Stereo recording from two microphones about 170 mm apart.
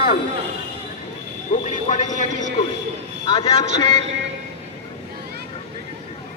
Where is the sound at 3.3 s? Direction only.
35° left (ahead or behind).